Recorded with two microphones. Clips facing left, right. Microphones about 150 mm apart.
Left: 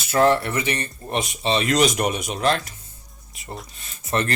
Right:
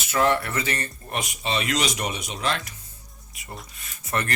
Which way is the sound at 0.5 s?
20° left (ahead or behind).